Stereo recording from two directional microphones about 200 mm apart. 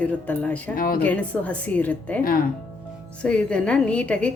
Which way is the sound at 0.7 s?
45° left (ahead or behind).